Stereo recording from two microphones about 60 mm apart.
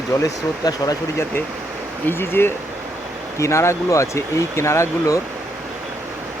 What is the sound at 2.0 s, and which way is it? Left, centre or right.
Speech, left.